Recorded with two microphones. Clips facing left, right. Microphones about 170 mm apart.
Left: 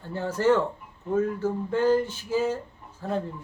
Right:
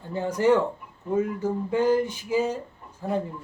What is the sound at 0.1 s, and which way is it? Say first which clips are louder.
Speech: right 1 dB; 15° right (ahead or behind).